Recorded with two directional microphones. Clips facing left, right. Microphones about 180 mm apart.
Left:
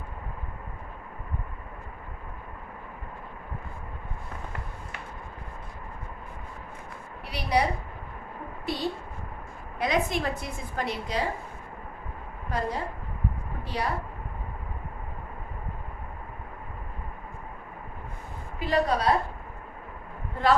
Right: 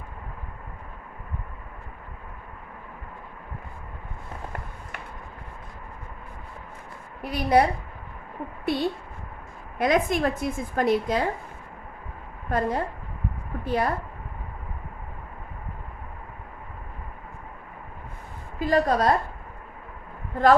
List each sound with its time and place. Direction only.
7.2 s a woman's voice: 50° right (ahead or behind)
8.7 s a sound: 55° right (ahead or behind)
9.7 s a woman's voice: 50° right (ahead or behind)
12.5 s a woman's voice: 50° right (ahead or behind)
18.6 s a woman's voice: 45° right (ahead or behind)